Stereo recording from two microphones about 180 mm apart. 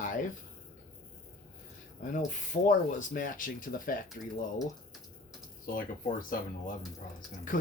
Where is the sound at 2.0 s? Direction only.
45° left (ahead or behind).